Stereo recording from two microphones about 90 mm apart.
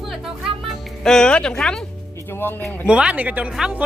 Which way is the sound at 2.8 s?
10° right (ahead or behind).